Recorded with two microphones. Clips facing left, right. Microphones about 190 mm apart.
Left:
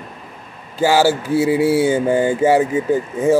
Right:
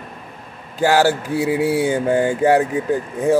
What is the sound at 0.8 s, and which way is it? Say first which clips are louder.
Speech: left 1 dB; 5° left (ahead or behind).